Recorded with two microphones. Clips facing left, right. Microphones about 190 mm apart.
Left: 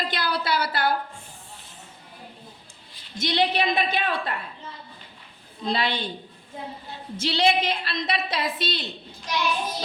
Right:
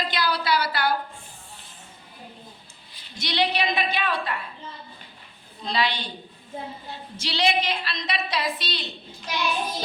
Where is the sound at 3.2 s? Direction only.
50° left (ahead or behind).